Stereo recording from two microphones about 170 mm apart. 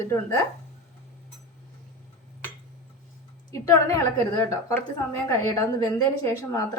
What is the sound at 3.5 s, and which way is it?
A woman's voice, 20° left (ahead or behind).